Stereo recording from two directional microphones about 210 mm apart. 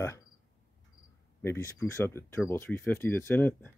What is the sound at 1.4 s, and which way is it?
Speech, 10° left (ahead or behind).